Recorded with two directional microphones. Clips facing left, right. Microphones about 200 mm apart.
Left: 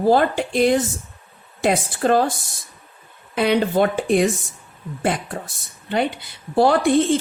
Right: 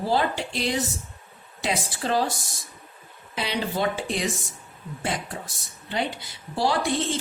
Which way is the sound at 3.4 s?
55° left (ahead or behind).